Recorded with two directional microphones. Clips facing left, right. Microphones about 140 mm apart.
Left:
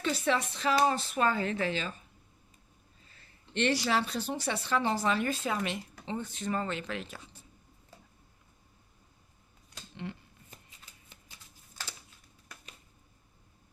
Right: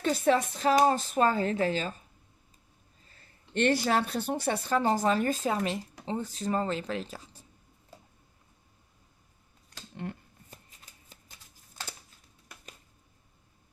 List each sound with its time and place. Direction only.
0.0 s speech: 45° right (ahead or behind)
3.1 s speech: 45° right (ahead or behind)
10.0 s speech: 45° right (ahead or behind)
10.9 s shuffling cards: 45° right (ahead or behind)